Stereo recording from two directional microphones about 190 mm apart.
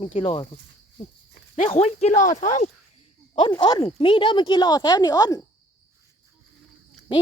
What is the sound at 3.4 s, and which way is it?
Speech, 25° left (ahead or behind).